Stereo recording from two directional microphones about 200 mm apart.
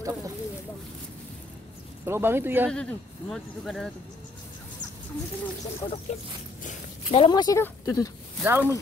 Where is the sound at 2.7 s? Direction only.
5° left (ahead or behind).